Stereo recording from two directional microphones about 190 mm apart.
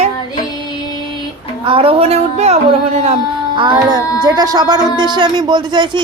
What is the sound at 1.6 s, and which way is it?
A woman's voice, 30° right (ahead or behind).